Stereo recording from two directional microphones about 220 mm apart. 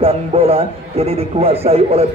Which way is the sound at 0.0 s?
25° right (ahead or behind).